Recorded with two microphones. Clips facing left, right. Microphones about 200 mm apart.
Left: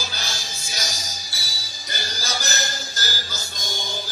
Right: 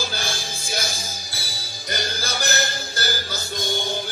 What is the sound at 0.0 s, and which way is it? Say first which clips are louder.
Music: right 5 dB; 55° right (ahead or behind).